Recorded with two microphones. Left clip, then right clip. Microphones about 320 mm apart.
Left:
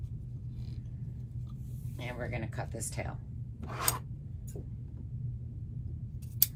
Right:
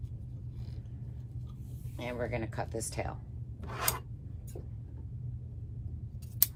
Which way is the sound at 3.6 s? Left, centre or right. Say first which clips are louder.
Even; centre.